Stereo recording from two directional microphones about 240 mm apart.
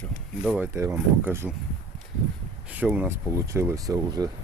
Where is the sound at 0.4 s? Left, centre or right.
Centre.